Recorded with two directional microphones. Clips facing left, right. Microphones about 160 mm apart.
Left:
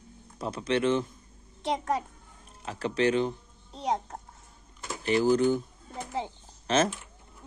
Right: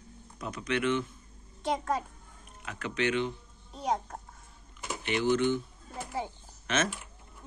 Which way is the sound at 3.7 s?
25° left (ahead or behind).